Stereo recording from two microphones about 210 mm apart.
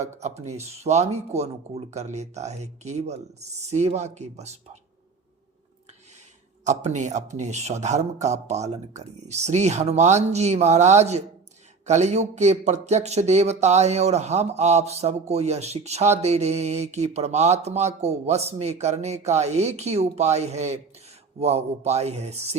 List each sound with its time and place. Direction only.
0.0 s speech: 35° right (ahead or behind)
6.7 s speech: 35° right (ahead or behind)